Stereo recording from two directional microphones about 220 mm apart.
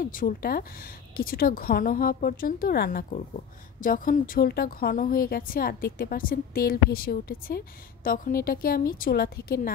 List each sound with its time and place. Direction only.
0.0 s a woman's voice: 40° left (ahead or behind)